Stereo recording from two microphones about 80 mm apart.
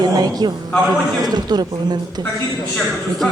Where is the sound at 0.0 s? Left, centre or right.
Right.